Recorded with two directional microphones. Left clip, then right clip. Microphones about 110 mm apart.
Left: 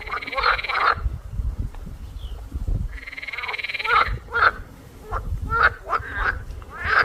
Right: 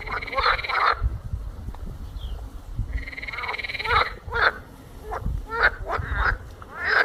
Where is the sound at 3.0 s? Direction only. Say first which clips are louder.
Left 1 dB; 40° left (ahead or behind).